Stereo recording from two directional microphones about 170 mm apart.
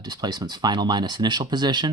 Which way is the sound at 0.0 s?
25° right (ahead or behind).